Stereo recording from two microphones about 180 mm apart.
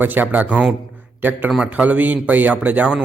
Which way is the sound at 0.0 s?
10° right (ahead or behind).